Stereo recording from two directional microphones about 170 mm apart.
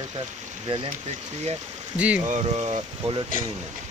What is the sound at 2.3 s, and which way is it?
Speech, 40° right (ahead or behind).